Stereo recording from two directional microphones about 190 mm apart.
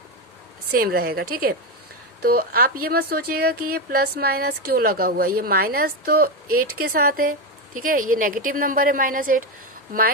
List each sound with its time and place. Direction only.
0.7 s speech: 55° right (ahead or behind)